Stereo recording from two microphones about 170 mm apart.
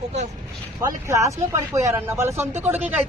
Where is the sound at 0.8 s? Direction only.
15° right (ahead or behind).